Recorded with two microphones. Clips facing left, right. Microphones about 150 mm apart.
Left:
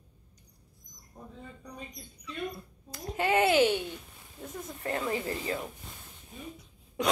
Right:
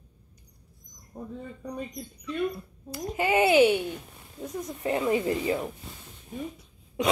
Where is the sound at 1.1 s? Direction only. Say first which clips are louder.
Right 8 dB; 85° right.